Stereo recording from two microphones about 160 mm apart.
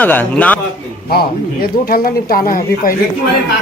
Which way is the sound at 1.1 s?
70° left (ahead or behind).